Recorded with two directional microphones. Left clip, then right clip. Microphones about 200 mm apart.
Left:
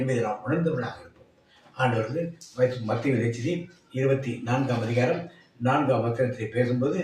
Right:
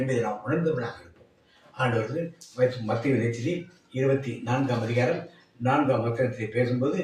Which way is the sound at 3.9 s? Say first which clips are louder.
Even; 10° left (ahead or behind).